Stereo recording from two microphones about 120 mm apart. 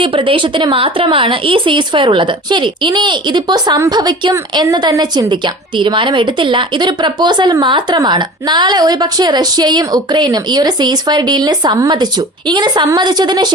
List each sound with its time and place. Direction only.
0.0 s a woman's voice: 45° right (ahead or behind)